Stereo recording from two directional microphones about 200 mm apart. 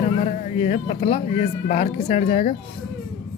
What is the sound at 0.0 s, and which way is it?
Speech, 35° left (ahead or behind).